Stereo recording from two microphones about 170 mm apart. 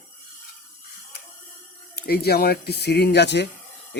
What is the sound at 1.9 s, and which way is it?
Speech, 65° left (ahead or behind).